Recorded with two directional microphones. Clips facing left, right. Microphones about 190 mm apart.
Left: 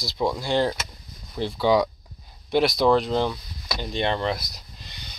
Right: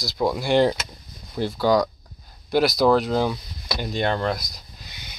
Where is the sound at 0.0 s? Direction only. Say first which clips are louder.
Right 2 dB; centre (ahead or behind).